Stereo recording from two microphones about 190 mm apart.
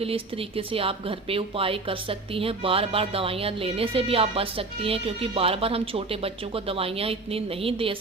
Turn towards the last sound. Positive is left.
turn(degrees=-30)  # may be behind; listen again after turning